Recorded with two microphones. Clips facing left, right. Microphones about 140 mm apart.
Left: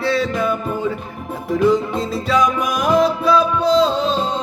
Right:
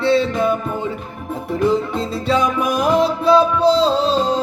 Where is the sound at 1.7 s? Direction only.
30° right (ahead or behind).